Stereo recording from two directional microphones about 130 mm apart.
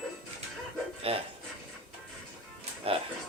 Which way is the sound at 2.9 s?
45° right (ahead or behind).